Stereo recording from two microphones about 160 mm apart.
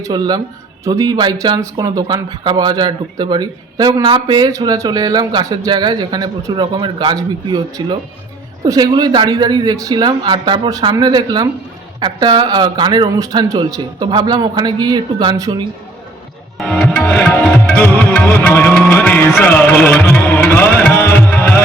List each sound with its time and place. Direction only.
0.0 s speech: 25° right (ahead or behind)
16.6 s music: centre (ahead or behind)